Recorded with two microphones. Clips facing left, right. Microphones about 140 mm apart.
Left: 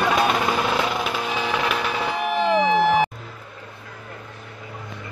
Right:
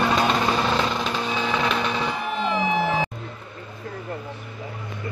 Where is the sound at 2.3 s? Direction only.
80° left.